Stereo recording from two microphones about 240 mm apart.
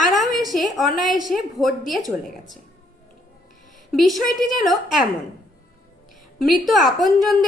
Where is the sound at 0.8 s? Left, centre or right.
Left.